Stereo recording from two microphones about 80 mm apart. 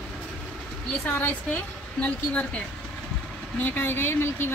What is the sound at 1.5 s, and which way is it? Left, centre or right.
Speech, centre.